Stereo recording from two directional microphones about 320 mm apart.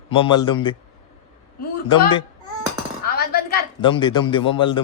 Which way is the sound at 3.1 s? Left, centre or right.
Left.